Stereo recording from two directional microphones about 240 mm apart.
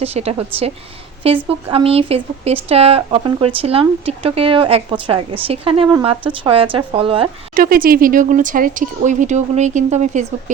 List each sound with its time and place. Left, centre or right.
0.0 s speech: right
7.5 s speech: right